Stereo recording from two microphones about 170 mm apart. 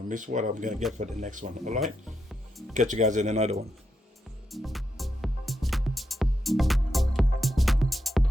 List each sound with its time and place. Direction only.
0.1 s speech: 50° right (ahead or behind)
1.8 s music: centre (ahead or behind)
2.7 s speech: 45° right (ahead or behind)
4.5 s music: centre (ahead or behind)